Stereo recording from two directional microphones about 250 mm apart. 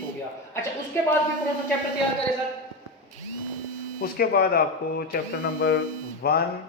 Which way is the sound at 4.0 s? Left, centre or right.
Left.